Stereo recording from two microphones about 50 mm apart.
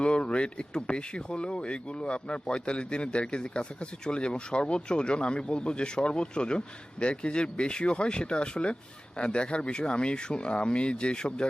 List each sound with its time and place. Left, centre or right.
0.0 s speech: left